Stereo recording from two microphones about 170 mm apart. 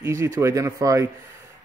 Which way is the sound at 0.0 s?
15° right (ahead or behind).